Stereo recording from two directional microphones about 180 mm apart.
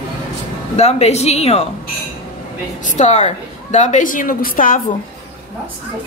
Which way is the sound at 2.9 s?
40° left (ahead or behind).